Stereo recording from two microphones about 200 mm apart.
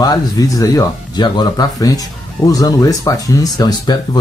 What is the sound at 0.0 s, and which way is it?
Speech, 20° left (ahead or behind).